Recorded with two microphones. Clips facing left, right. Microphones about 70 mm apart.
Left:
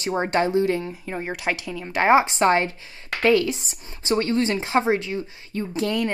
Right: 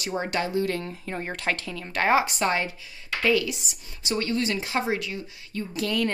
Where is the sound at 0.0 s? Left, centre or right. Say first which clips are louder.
Left 6 dB; left.